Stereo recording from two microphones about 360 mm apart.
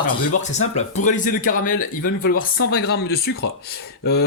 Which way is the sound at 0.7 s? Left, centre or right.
Centre.